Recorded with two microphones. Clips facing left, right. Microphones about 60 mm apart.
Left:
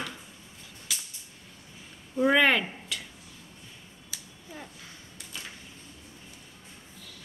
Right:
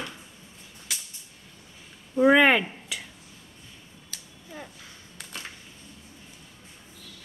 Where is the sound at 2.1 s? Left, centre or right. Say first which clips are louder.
Right 4 dB; centre.